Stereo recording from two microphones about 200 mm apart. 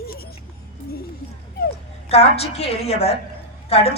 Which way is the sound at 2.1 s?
30° left (ahead or behind).